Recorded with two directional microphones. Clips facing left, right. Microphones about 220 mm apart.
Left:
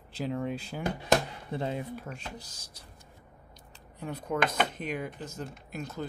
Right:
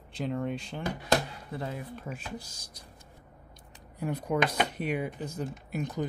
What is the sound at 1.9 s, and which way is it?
Speech, centre (ahead or behind).